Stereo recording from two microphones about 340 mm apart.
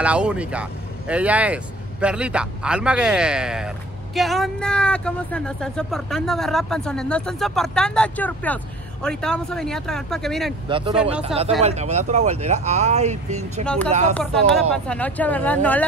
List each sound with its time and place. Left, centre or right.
0.0 s speech: centre
10.7 s speech: centre
11.0 s speech: centre
11.2 s speech: centre
14.1 s speech: centre